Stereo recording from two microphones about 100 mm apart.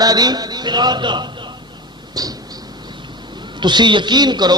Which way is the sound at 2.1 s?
40° right (ahead or behind).